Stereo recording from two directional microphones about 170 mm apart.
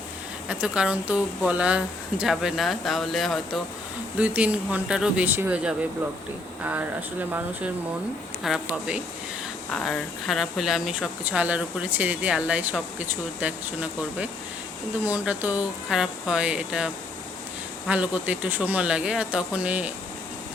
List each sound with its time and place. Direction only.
0.4 s speech: 5° right (ahead or behind)
8.4 s speech: 5° right (ahead or behind)
15.0 s speech: 10° right (ahead or behind)